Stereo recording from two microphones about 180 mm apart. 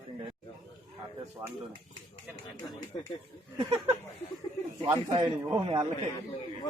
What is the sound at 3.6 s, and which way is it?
Speech, 30° right (ahead or behind).